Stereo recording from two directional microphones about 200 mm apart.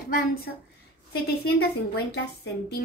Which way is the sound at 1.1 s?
55° left (ahead or behind).